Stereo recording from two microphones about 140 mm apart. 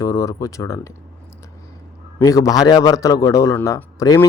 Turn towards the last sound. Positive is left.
turn(degrees=25)  # may be behind; listen again after turning